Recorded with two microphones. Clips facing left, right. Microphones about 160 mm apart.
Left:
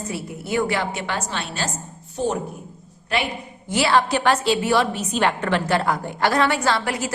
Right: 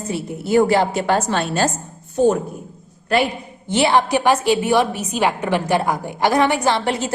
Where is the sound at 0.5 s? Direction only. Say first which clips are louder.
Right 8 dB; 35° right (ahead or behind).